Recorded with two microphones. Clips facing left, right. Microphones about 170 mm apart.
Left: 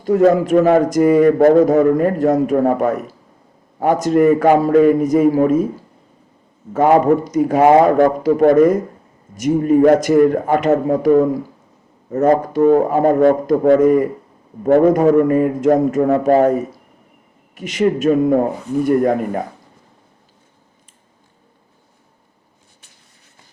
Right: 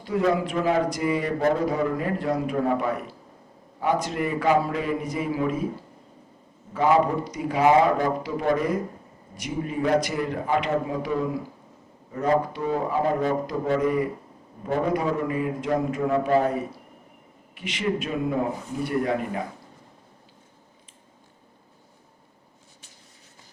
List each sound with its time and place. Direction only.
0.0 s a man's voice: 45° left (ahead or behind)
6.7 s a man's voice: 50° left (ahead or behind)
17.5 s a man's voice: 45° left (ahead or behind)